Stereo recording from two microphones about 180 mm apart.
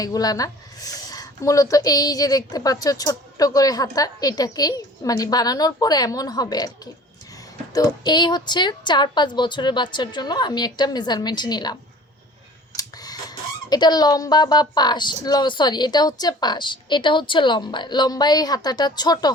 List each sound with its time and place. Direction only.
0.0 s a woman's voice: 20° left (ahead or behind)
7.7 s a woman's voice: 20° left (ahead or behind)